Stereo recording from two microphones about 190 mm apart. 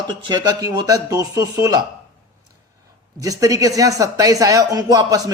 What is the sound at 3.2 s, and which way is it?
Speech, 20° right (ahead or behind).